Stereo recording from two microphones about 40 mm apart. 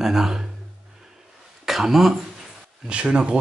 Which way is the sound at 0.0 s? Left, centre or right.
Centre.